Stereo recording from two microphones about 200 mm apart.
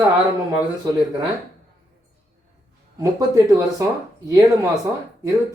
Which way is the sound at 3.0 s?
15° right (ahead or behind).